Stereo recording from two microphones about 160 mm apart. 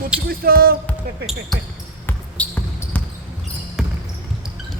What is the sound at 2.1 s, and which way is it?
Basketball bounce, 10° left (ahead or behind).